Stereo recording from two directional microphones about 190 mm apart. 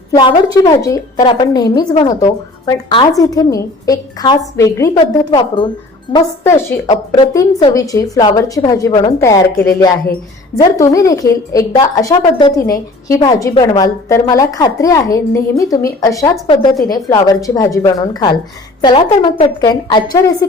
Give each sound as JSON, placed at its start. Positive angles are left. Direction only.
{"t": 0.1, "sound": "a woman's voice", "side_deg": 20}
{"t": 10.6, "sound": "a woman's voice", "side_deg": 15}